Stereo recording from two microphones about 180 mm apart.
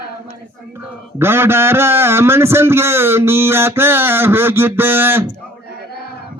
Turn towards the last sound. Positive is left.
turn(degrees=-10)  # may be behind; listen again after turning